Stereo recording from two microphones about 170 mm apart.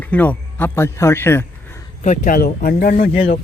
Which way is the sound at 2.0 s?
50° left (ahead or behind).